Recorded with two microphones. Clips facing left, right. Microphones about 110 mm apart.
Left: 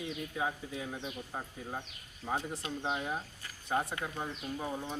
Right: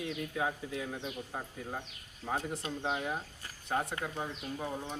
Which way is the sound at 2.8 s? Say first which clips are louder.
Even; centre (ahead or behind).